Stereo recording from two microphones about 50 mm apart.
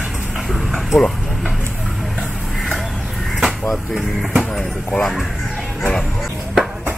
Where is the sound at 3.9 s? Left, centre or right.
Centre.